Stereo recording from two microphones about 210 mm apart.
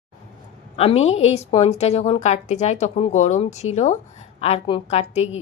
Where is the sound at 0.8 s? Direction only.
30° left (ahead or behind).